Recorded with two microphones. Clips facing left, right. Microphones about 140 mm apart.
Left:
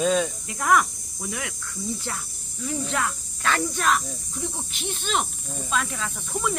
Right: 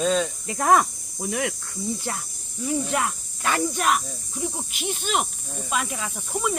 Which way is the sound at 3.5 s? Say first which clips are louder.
Right 1 dB; 15° right (ahead or behind).